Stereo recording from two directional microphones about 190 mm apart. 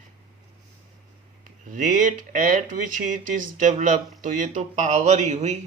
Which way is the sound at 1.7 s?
40° right (ahead or behind).